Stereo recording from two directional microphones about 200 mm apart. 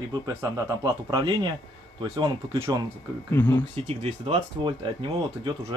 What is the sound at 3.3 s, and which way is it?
Speech, 15° left (ahead or behind).